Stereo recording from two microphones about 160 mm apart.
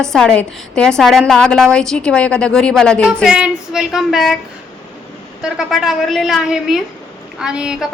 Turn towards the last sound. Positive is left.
turn(degrees=-5)  # may be behind; listen again after turning